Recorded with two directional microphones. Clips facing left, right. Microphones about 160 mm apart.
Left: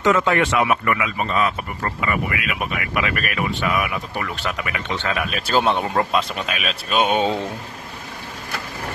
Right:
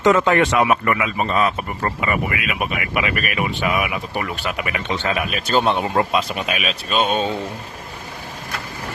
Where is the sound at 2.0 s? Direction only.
20° right (ahead or behind).